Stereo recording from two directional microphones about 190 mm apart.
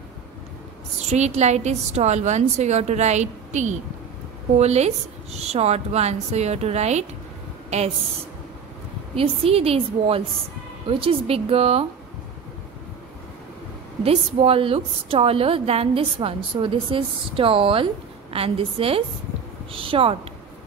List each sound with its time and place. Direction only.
0.9 s a woman's voice: 35° right (ahead or behind)
9.1 s a woman's voice: 30° right (ahead or behind)
14.0 s a woman's voice: 30° right (ahead or behind)